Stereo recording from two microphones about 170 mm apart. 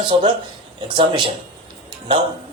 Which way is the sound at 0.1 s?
30° right (ahead or behind).